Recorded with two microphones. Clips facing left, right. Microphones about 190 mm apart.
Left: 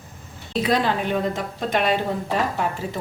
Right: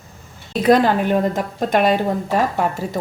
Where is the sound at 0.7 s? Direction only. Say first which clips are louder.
Right 8 dB; 50° right (ahead or behind).